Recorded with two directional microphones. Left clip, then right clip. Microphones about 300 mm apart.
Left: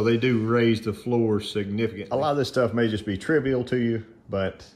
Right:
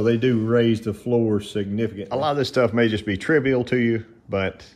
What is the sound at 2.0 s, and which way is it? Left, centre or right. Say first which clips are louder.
Speech: right 2 dB; centre.